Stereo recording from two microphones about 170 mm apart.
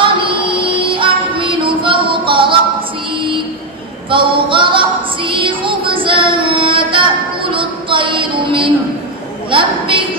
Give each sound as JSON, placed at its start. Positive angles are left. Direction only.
{"t": 0.0, "sound": "music", "side_deg": -30}
{"t": 4.1, "sound": "female singing", "side_deg": -30}
{"t": 9.5, "sound": "a woman's voice", "side_deg": -30}